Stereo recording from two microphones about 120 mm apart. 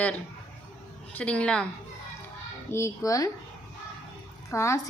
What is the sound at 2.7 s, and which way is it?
Speech, 25° left (ahead or behind).